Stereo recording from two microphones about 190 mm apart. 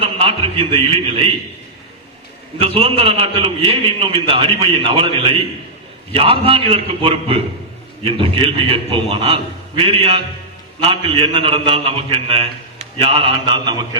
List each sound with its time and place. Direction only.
0.0 s a man's voice: 30° right (ahead or behind)
2.6 s a man's voice: 30° right (ahead or behind)